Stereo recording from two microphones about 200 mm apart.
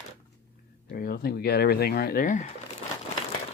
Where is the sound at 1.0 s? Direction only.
50° left (ahead or behind).